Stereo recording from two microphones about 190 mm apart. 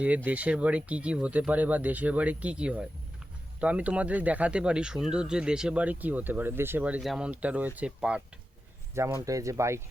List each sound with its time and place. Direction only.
0.3 s speech: 5° right (ahead or behind)
9.2 s speech: 15° right (ahead or behind)